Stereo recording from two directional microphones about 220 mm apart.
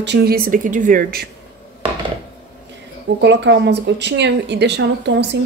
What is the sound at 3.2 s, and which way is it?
A woman's voice, 50° right (ahead or behind).